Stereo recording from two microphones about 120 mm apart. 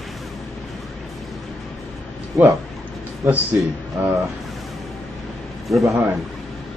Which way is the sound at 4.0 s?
15° right (ahead or behind).